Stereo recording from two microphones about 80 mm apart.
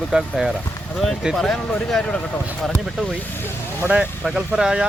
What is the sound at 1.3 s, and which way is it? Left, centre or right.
Speech, centre.